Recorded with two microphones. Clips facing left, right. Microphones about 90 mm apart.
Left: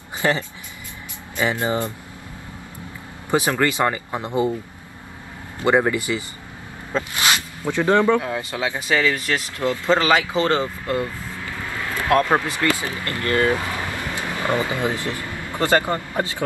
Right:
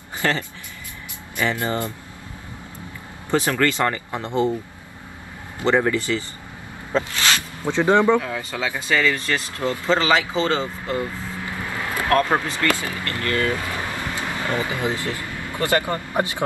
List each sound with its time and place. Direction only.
0.2 s speech: 15° left (ahead or behind)
3.3 s speech: 15° left (ahead or behind)
5.7 s speech: 15° left (ahead or behind)
7.1 s a sound: 15° left (ahead or behind)
7.6 s speech: 20° right (ahead or behind)
8.2 s speech: 20° left (ahead or behind)
11.4 s vehicle: 20° right (ahead or behind)
12.1 s speech: 15° left (ahead or behind)
14.1 s a sound: 20° left (ahead or behind)
15.0 s speech: 20° left (ahead or behind)
16.1 s speech: 20° right (ahead or behind)